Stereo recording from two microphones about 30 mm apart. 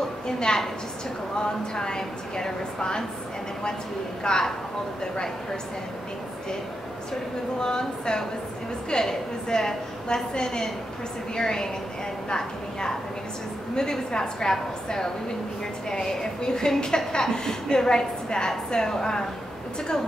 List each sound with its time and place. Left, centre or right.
0.5 s a woman's voice: left
4.2 s a woman's voice: left
7.6 s a woman's voice: left
15.9 s a woman's voice: left